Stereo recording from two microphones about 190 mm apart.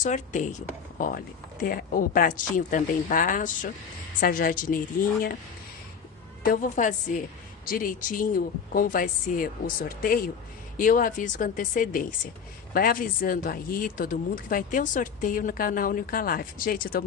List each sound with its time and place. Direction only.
0.0 s speech: 40° left (ahead or behind)
6.4 s speech: 45° left (ahead or behind)